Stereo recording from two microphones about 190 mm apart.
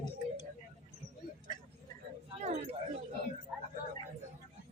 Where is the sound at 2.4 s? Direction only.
35° right (ahead or behind).